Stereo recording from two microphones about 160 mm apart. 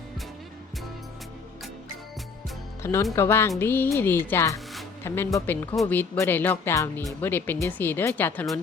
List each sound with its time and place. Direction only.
2.8 s speech: 15° left (ahead or behind)